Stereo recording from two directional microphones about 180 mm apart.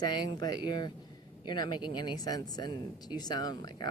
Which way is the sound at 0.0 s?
25° left (ahead or behind).